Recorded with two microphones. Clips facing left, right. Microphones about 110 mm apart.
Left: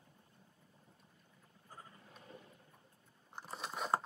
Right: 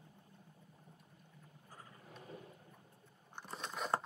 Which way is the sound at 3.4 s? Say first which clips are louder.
Left 1 dB; 5° left (ahead or behind).